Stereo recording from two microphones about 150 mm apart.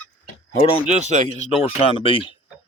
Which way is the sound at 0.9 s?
55° right (ahead or behind).